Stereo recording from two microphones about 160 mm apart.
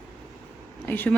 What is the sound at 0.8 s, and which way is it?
Speech, 10° left (ahead or behind).